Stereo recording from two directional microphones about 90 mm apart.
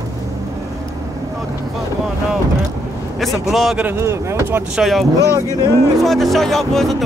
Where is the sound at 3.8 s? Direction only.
30° right (ahead or behind).